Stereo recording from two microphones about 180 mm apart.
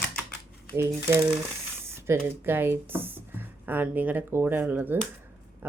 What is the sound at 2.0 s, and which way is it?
Speech, 10° right (ahead or behind).